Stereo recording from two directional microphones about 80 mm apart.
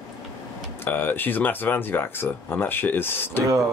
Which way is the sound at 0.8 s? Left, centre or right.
Left.